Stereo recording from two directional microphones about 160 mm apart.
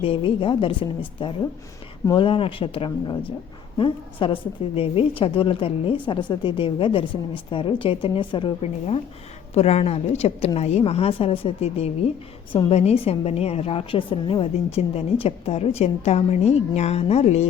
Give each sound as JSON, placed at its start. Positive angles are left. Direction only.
{"t": 0.0, "sound": "a woman's voice", "side_deg": 35}
{"t": 9.6, "sound": "a woman's voice", "side_deg": 40}